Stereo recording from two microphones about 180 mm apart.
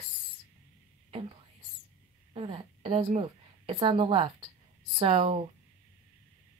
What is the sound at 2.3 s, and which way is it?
A woman's voice, 25° right (ahead or behind).